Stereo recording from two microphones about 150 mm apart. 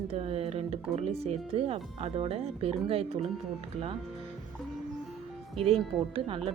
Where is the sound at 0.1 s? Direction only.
40° right (ahead or behind).